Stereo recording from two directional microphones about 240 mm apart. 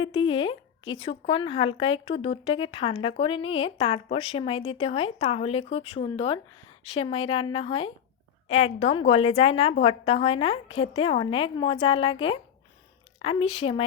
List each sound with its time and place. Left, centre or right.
0.0 s speech: left
13.1 s speech: left